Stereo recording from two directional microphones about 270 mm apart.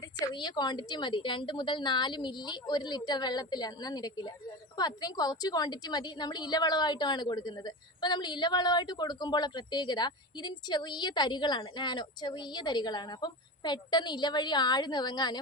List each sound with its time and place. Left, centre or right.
0.3 s a woman's voice: centre